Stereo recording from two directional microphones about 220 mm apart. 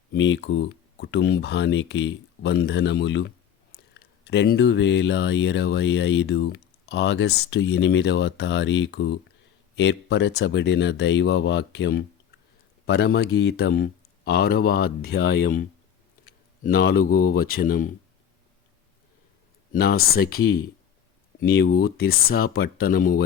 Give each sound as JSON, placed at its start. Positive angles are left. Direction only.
{"t": 0.1, "sound": "speech", "side_deg": 55}
{"t": 16.6, "sound": "speech", "side_deg": 45}
{"t": 17.0, "sound": "speech", "side_deg": 75}
{"t": 17.3, "sound": "speech", "side_deg": 40}
{"t": 19.7, "sound": "speech", "side_deg": 45}